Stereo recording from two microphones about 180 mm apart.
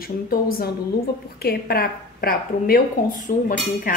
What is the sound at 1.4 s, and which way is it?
A woman's voice, 60° left (ahead or behind).